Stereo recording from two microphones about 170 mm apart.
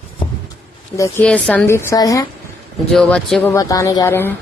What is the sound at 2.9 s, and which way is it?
Speech, 5° left (ahead or behind).